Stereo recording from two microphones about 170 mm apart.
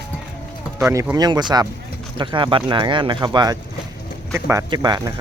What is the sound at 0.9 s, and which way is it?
Speech, 15° right (ahead or behind).